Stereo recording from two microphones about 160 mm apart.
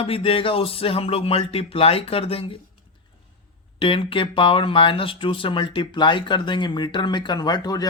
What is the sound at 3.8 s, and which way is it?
Speech, 35° left (ahead or behind).